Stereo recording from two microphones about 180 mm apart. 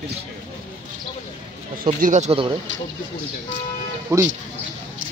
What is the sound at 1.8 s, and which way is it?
Speech, 45° right (ahead or behind).